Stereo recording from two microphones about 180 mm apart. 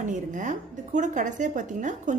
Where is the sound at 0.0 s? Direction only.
45° right (ahead or behind).